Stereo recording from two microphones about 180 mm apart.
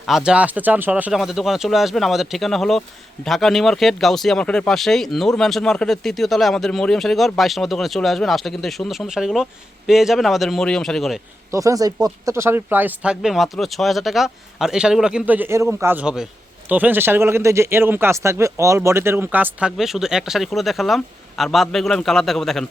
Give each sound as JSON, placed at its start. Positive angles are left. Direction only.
{"t": 0.1, "sound": "speech", "side_deg": -5}
{"t": 11.5, "sound": "speech", "side_deg": -20}